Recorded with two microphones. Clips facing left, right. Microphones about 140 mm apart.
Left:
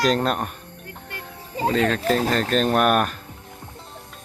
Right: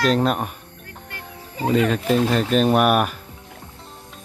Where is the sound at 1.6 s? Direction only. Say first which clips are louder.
Right 1 dB; 10° right (ahead or behind).